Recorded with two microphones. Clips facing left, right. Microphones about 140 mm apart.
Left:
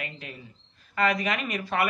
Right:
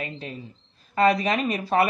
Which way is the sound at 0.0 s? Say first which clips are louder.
Right 5 dB; 30° right (ahead or behind).